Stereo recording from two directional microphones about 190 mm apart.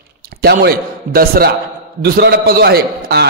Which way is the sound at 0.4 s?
55° right (ahead or behind).